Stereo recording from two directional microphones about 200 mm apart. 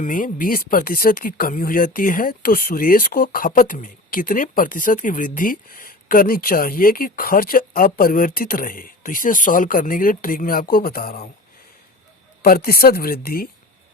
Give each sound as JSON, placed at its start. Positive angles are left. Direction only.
{"t": 0.0, "sound": "speech", "side_deg": 40}
{"t": 12.4, "sound": "speech", "side_deg": 50}